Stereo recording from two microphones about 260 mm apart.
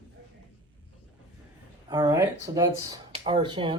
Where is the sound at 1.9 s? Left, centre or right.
Centre.